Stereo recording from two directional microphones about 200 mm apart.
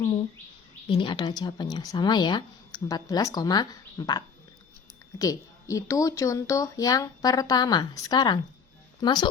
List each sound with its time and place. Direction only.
0.9 s speech: 25° left (ahead or behind)
5.2 s speech: 15° left (ahead or behind)